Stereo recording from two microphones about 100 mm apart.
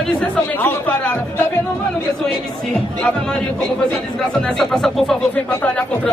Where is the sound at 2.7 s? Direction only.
10° left (ahead or behind).